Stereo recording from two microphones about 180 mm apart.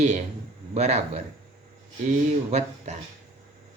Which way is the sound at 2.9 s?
40° right (ahead or behind).